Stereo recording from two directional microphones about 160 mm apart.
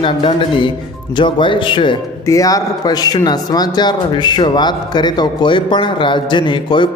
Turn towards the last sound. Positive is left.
turn(degrees=30)  # may be behind; listen again after turning